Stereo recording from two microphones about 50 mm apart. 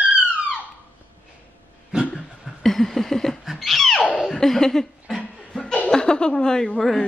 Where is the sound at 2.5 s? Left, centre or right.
Centre.